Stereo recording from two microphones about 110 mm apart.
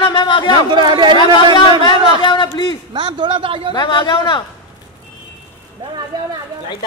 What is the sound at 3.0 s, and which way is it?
Speech, 50° right (ahead or behind).